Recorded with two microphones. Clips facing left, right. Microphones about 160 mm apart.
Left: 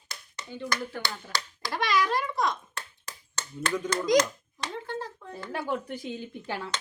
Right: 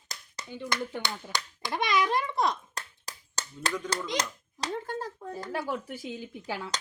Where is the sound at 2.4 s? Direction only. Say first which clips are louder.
Even; 35° right (ahead or behind).